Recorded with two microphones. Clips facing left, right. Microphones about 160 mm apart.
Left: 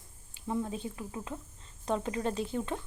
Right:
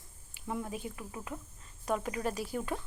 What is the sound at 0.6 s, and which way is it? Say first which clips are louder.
Speech: left 3 dB; 25° left (ahead or behind).